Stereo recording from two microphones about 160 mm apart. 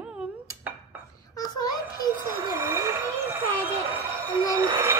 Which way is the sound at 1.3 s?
25° left (ahead or behind).